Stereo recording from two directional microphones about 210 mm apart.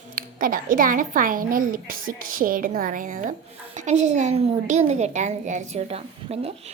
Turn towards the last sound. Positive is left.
turn(degrees=-30)  # may be behind; listen again after turning